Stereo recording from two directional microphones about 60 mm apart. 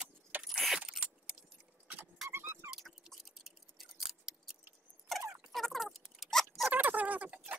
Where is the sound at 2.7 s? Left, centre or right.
Centre.